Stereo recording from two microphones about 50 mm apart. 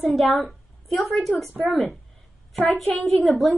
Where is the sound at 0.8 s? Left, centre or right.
Centre.